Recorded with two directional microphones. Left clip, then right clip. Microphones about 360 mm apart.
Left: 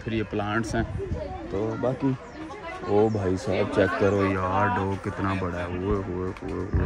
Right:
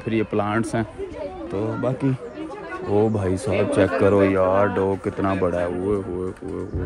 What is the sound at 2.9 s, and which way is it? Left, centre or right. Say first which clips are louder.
Speech: right 2 dB; right.